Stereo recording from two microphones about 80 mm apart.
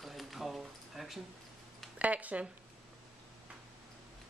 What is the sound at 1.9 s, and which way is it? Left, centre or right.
Speech, centre.